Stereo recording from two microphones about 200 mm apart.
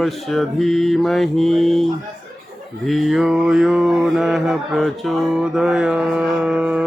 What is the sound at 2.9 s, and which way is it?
Mantra, centre (ahead or behind).